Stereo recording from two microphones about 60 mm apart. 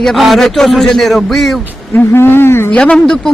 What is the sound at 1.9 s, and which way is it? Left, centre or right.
Speech, left.